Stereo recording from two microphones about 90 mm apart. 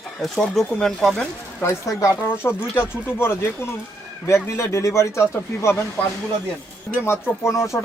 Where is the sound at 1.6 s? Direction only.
35° left (ahead or behind).